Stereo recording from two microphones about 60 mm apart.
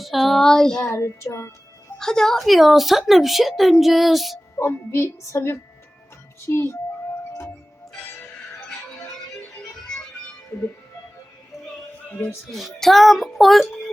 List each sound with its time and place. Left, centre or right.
0.0 s speech: centre
0.9 s a woman's voice: left
2.0 s speech: centre
4.5 s a woman's voice: left
12.5 s speech: centre